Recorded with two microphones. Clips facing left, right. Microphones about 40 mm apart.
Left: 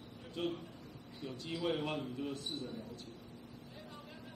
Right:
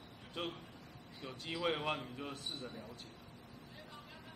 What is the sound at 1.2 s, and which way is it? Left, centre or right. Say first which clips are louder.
Speech: even; right.